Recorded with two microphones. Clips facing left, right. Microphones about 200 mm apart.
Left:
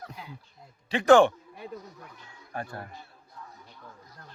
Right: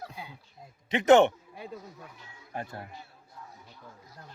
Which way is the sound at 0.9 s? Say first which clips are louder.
Left 1 dB; 20° right (ahead or behind).